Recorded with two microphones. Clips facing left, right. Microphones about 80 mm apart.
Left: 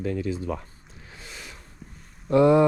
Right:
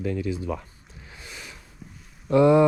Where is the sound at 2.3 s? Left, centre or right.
Left.